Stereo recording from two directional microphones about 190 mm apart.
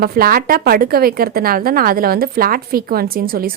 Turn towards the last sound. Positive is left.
turn(degrees=-50)  # may be behind; listen again after turning